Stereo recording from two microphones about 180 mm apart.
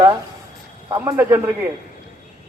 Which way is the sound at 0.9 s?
15° right (ahead or behind).